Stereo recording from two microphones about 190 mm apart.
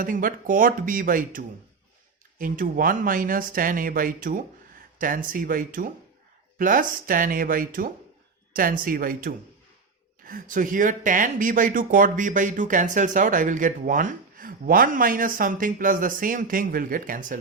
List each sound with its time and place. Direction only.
0.0 s speech: 45° right (ahead or behind)